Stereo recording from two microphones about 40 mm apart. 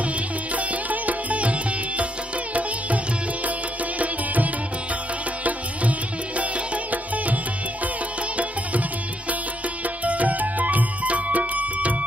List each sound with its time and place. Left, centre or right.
0.6 s music: right
5.4 s music: right
10.0 s music: right